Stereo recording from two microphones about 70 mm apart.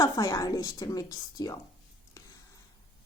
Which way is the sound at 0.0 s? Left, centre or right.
Left.